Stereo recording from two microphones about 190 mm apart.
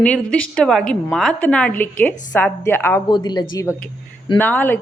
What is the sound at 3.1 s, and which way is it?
A woman's voice, 20° left (ahead or behind).